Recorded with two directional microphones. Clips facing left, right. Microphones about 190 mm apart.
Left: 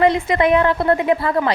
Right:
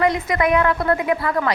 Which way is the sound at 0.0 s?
25° left (ahead or behind).